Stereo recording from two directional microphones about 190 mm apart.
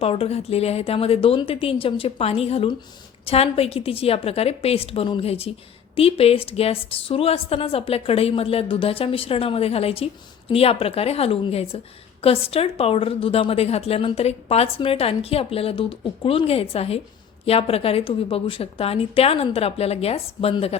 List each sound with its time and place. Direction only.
0.0 s a woman's voice: 30° left (ahead or behind)